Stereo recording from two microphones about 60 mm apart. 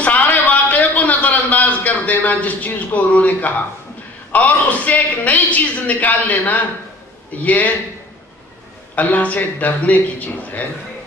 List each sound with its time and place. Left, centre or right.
0.0 s a sound: left
4.3 s a woman's voice: left
8.9 s a woman's voice: left